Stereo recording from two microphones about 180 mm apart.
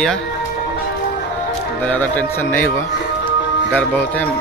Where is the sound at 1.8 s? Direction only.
10° left (ahead or behind).